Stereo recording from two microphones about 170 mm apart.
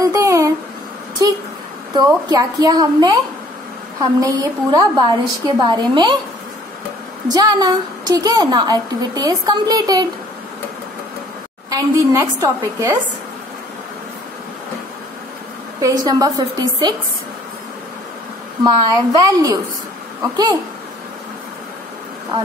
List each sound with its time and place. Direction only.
0.0 s a sound: 20° right (ahead or behind)
1.2 s a woman's voice: 25° right (ahead or behind)
7.2 s a woman's voice: 20° right (ahead or behind)
11.7 s a woman's voice: 20° right (ahead or behind)
15.8 s a woman's voice: 20° right (ahead or behind)
18.6 s a woman's voice: 20° right (ahead or behind)